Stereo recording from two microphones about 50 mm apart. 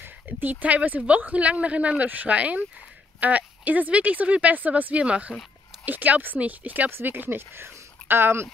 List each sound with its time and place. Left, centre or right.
0.0 s speech: right
5.0 s speech: right
5.9 s speech: right
6.9 s speech: right